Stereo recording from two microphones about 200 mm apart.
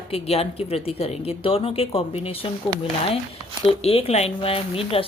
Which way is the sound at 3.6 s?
30° left (ahead or behind).